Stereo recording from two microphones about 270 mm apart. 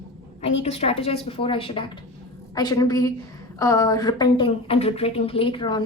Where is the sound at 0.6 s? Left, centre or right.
Left.